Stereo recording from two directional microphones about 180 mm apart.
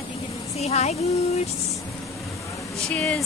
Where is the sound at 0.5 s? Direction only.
35° left (ahead or behind).